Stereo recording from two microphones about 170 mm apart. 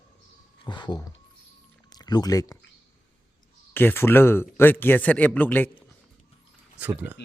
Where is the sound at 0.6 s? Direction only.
25° left (ahead or behind).